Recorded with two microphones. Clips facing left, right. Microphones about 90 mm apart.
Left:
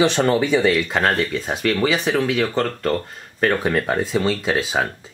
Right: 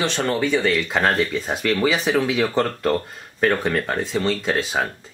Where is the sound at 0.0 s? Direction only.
15° left (ahead or behind).